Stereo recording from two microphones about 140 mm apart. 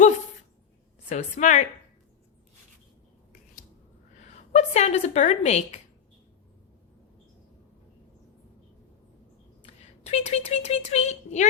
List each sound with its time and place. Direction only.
1.1 s a woman's voice: 60° left (ahead or behind)
4.5 s a woman's voice: 50° left (ahead or behind)
9.6 s speech: 50° left (ahead or behind)